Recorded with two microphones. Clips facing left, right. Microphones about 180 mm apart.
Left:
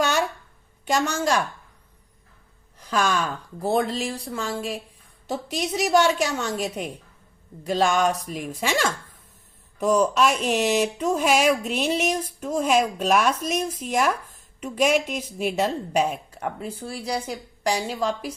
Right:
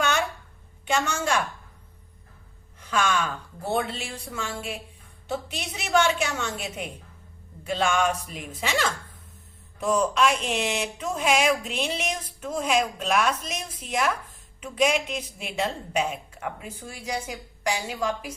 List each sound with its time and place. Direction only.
0.0 s a sound: 40° left (ahead or behind)
0.9 s a woman's voice: 40° left (ahead or behind)
2.9 s a woman's voice: 35° left (ahead or behind)